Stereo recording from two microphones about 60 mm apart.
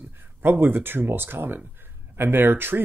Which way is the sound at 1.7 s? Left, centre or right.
Right.